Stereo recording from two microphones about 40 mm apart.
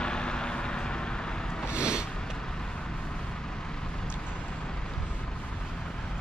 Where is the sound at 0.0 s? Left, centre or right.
Left.